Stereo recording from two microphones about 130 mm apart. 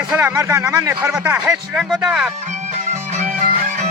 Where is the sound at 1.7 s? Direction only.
5° right (ahead or behind).